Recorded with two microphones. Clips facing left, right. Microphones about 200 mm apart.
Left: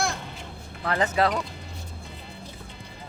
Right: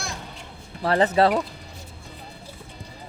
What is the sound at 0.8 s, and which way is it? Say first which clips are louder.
Speech: right 5 dB; 35° right (ahead or behind).